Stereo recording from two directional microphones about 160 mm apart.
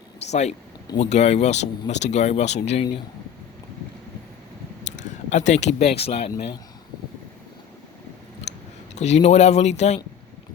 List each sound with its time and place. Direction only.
0.3 s speech: 45° left (ahead or behind)
4.9 s speech: 45° left (ahead or behind)
9.0 s speech: 45° left (ahead or behind)